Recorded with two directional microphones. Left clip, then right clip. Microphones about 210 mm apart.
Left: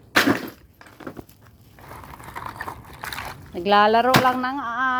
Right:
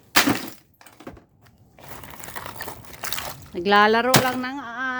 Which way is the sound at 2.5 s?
15° right (ahead or behind).